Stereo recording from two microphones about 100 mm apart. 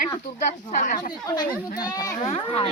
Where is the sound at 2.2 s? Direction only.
75° left (ahead or behind).